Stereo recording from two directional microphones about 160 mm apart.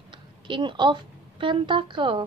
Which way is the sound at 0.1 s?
30° right (ahead or behind).